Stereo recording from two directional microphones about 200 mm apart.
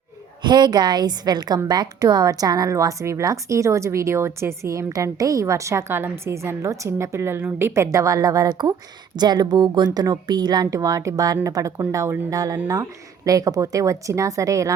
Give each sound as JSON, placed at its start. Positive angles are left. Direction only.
{"t": 0.4, "sound": "a woman's voice", "side_deg": -20}